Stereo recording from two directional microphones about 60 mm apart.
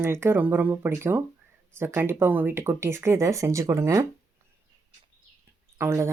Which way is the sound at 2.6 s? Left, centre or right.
Right.